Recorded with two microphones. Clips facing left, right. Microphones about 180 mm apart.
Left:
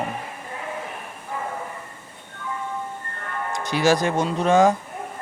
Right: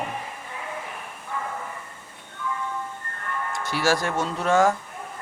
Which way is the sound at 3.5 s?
20° left (ahead or behind).